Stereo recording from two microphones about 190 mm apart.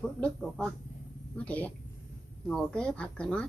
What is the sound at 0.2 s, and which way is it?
A woman's voice, 5° left (ahead or behind).